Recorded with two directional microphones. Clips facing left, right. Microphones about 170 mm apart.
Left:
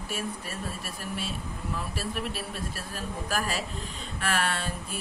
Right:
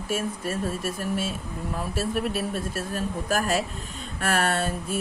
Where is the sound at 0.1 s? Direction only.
45° right (ahead or behind).